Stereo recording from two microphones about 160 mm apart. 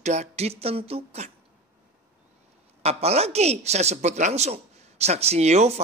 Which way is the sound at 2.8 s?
40° right (ahead or behind).